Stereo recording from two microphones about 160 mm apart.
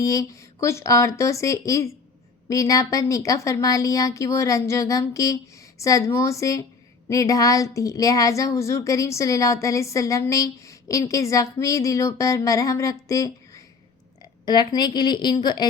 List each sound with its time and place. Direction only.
0.0 s a woman's voice: 20° left (ahead or behind)